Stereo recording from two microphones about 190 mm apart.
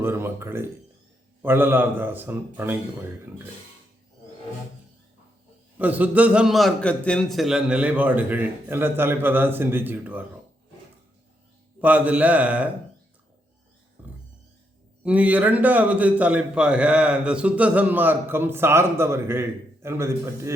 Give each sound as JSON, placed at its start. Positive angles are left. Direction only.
{"t": 0.0, "sound": "a man's voice", "side_deg": -10}
{"t": 5.8, "sound": "a man's voice", "side_deg": -10}
{"t": 11.8, "sound": "a man's voice", "side_deg": -10}
{"t": 14.0, "sound": "music", "side_deg": -10}
{"t": 15.0, "sound": "a man's voice", "side_deg": -5}